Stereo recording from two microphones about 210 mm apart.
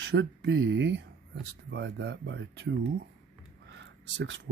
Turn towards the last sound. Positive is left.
turn(degrees=-60)  # may be behind; listen again after turning